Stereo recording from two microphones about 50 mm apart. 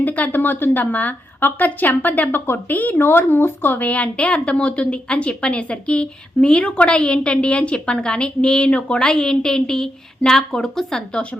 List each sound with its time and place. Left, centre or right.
0.0 s a woman's voice: left
3.8 s a woman's voice: left; by 11.2 s centre